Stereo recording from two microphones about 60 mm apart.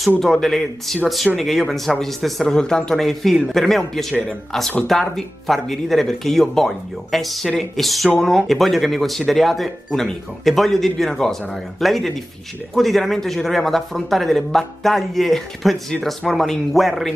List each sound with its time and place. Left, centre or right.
0.2 s speech: centre